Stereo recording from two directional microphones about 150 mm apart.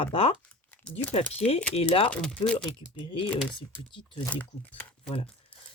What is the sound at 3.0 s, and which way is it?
Speech, 35° left (ahead or behind).